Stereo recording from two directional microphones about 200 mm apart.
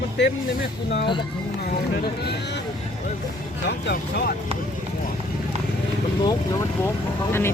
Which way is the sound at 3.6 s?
55° left (ahead or behind).